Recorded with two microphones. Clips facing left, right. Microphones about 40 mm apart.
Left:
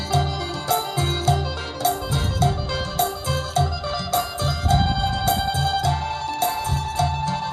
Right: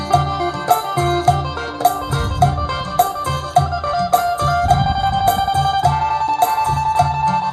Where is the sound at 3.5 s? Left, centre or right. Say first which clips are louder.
Right 10 dB; right.